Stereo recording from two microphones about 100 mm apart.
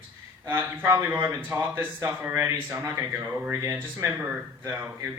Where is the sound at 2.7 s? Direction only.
30° right (ahead or behind).